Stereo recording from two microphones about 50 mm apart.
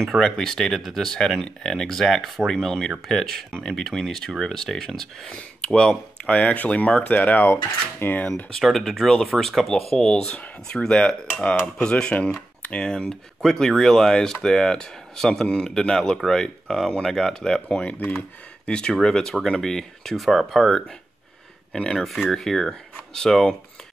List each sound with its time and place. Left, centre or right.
0.2 s speech: centre
2.5 s speech: centre
5.3 s speech: centre
7.0 s cutlery: left
8.5 s speech: centre
21.9 s speech: centre